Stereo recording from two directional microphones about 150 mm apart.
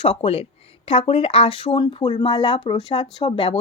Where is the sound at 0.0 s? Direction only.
40° left (ahead or behind).